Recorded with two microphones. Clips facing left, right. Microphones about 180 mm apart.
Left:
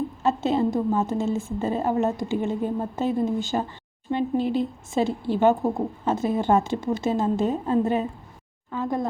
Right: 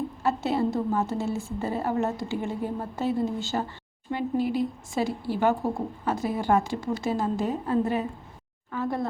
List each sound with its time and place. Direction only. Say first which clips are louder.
0.2 s a woman's voice: left 3 dB; 20° left (ahead or behind)